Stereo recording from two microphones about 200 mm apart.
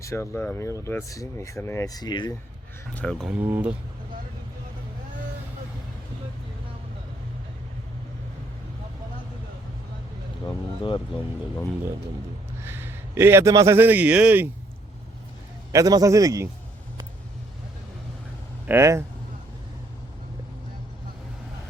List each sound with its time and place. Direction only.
0.0 s speech: 15° left (ahead or behind)
2.9 s speech: 5° left (ahead or behind)
12.6 s a man's voice: 10° right (ahead or behind)
15.7 s a man's voice: 15° right (ahead or behind)
18.7 s a man's voice: 15° right (ahead or behind)